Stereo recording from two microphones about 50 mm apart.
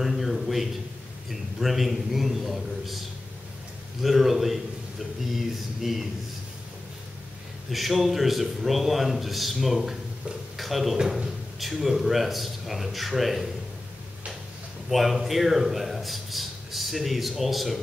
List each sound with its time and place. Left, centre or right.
0.0 s a sound: centre
1.3 s a man's voice: centre
4.0 s a man's voice: centre
7.7 s a man's voice: centre
11.0 s speech: centre
11.6 s a man's voice: centre
14.9 s a man's voice: centre